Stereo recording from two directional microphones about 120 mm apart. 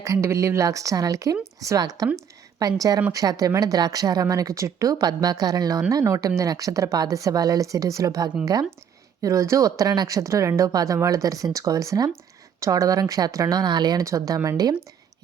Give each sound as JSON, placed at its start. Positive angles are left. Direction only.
{"t": 0.0, "sound": "speech", "side_deg": -25}